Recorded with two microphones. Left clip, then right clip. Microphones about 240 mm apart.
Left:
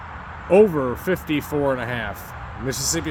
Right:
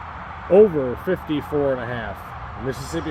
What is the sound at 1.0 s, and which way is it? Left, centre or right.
Speech, centre.